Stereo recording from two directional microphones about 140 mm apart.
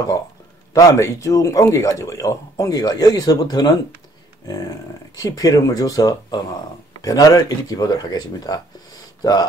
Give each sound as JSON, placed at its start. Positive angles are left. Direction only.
{"t": 0.7, "sound": "speech", "side_deg": 20}